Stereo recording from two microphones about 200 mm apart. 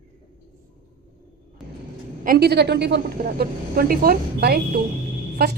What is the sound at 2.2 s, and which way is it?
A woman's voice, 50° right (ahead or behind).